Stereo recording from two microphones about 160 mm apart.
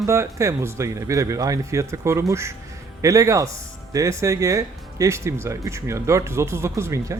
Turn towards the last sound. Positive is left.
turn(degrees=-20)  # may be behind; listen again after turning